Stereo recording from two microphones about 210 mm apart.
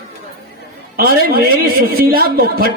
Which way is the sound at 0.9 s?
45° right (ahead or behind).